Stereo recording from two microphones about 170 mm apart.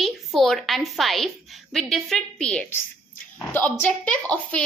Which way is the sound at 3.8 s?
10° left (ahead or behind).